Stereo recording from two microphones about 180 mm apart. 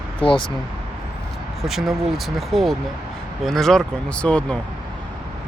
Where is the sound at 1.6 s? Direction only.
Centre (ahead or behind).